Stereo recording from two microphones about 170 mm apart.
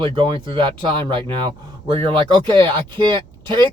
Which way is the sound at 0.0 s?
30° right (ahead or behind).